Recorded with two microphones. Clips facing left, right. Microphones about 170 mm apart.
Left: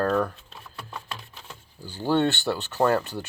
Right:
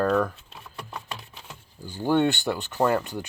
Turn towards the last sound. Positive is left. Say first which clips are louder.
# left 1 dB
turn(degrees=-10)  # may be behind; listen again after turning